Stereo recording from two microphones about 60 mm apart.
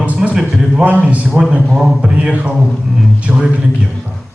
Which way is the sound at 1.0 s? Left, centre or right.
Right.